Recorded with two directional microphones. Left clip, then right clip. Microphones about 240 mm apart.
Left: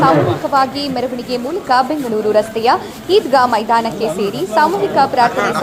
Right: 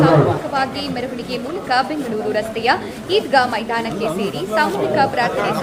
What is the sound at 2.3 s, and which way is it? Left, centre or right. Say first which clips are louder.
A woman's voice: left 4 dB; centre.